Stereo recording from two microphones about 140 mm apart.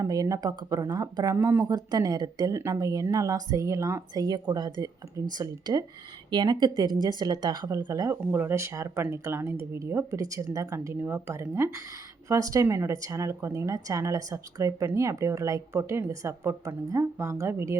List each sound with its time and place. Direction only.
0.0 s speech: 25° right (ahead or behind)